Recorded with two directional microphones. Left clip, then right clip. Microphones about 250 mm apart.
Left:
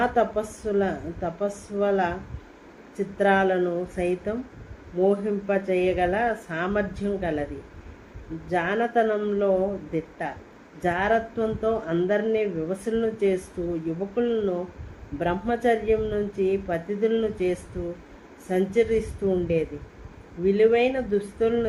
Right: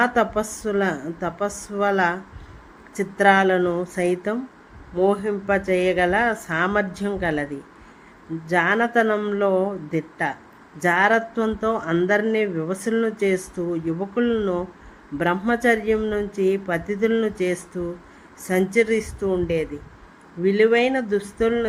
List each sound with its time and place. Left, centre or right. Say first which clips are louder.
0.0 s speech: right 3 dB; right
3.2 s speech: right 5 dB; right
8.4 s speech: right 5 dB; right